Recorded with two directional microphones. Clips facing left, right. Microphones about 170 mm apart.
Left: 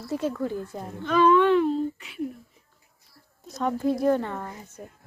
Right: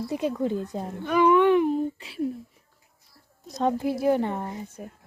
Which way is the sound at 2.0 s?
30° right (ahead or behind).